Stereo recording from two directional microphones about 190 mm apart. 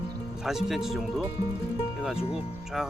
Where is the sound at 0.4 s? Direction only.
Centre (ahead or behind).